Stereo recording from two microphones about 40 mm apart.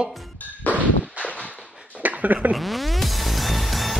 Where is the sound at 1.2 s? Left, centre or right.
Left.